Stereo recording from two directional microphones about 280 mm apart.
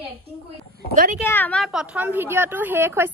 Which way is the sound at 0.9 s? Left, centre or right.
Right.